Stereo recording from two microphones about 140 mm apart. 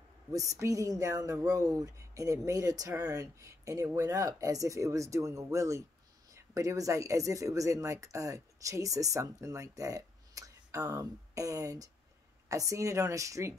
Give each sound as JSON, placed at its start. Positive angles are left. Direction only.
{"t": 0.3, "sound": "speech", "side_deg": -25}